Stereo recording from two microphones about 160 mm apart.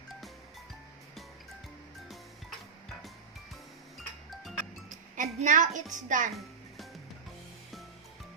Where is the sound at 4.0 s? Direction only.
Centre (ahead or behind).